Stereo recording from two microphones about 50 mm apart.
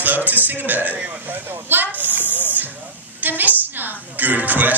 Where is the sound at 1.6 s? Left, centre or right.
Right.